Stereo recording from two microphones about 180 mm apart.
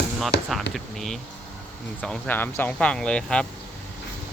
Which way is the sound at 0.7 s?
Centre (ahead or behind).